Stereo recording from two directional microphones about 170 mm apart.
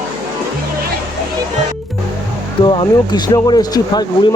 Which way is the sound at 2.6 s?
30° left (ahead or behind).